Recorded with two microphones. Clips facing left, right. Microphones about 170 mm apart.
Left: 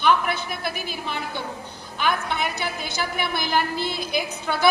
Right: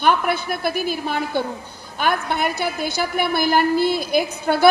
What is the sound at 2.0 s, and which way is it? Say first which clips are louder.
A woman's voice: right 4 dB; 50° right (ahead or behind).